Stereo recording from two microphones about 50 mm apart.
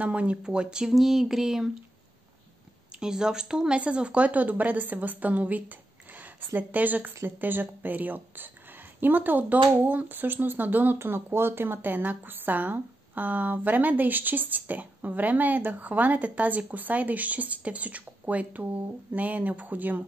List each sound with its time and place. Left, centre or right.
0.0 s speech: right
0.9 s speech: centre
3.0 s speech: centre; by 11.0 s right
11.0 s speech: right